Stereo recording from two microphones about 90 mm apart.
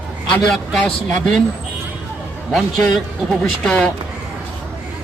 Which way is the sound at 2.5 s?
Centre (ahead or behind).